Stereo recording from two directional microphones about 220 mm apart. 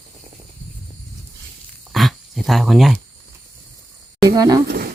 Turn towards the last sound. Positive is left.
turn(degrees=-45)  # may be behind; listen again after turning